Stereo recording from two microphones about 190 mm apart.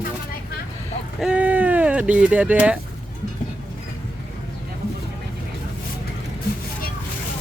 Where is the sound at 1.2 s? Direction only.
5° right (ahead or behind).